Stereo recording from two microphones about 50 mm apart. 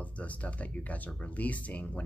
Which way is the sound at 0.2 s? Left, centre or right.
Left.